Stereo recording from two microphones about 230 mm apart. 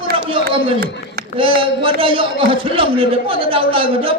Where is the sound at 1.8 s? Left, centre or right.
Right.